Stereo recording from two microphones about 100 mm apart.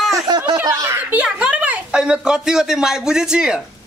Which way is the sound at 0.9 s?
15° right (ahead or behind).